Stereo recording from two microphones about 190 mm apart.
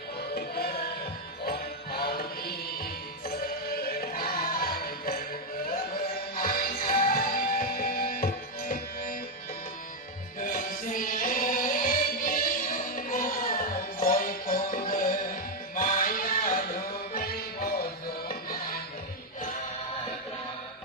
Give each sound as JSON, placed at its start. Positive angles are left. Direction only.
{"t": 0.3, "sound": "music", "side_deg": 55}
{"t": 10.4, "sound": "music", "side_deg": 45}